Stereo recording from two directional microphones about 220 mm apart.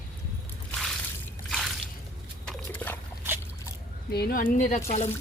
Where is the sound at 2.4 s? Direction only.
10° left (ahead or behind).